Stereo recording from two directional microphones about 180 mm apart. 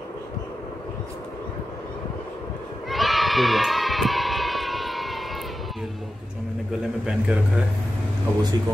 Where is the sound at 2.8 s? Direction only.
Centre (ahead or behind).